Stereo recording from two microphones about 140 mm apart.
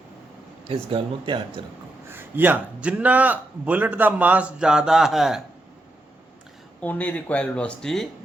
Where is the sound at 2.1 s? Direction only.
15° right (ahead or behind).